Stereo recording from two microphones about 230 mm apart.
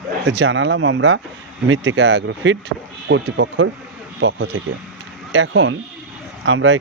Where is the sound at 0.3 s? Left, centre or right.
Right.